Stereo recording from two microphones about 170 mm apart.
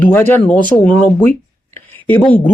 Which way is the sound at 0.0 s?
10° left (ahead or behind).